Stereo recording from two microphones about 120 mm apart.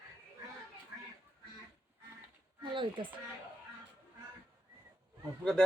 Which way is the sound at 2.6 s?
45° right (ahead or behind).